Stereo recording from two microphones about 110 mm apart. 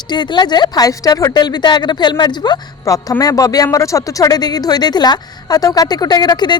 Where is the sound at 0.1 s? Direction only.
45° left (ahead or behind).